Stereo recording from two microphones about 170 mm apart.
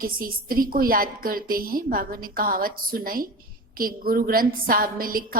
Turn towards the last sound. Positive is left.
turn(degrees=-55)  # may be behind; listen again after turning